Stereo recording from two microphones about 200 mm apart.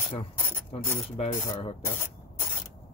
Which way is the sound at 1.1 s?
30° left (ahead or behind).